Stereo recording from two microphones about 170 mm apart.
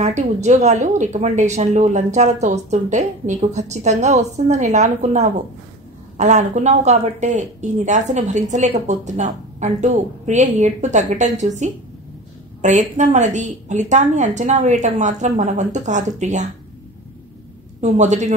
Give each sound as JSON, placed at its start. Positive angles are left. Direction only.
{"t": 0.0, "sound": "a woman's voice", "side_deg": -45}
{"t": 17.7, "sound": "a woman's voice", "side_deg": -45}